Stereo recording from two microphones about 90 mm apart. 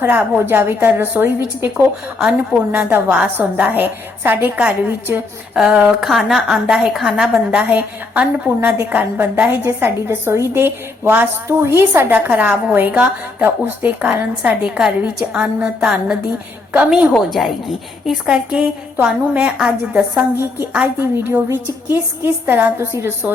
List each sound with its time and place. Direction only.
0.0 s a woman's voice: 20° right (ahead or behind)
1.7 s a woman's voice: 5° right (ahead or behind)
2.7 s a woman's voice: 20° right (ahead or behind)
5.7 s a woman's voice: 5° right (ahead or behind)
7.6 s a woman's voice: 15° right (ahead or behind)
17.2 s a woman's voice: centre (ahead or behind)
20.3 s a woman's voice: 25° right (ahead or behind)